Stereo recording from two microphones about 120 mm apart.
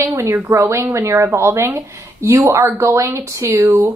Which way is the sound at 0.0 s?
25° right (ahead or behind).